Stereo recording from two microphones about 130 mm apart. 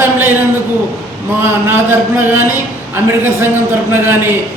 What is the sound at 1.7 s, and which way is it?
A man's voice, 15° right (ahead or behind).